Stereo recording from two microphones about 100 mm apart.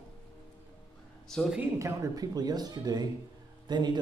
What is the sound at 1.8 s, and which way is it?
Speech, 35° right (ahead or behind).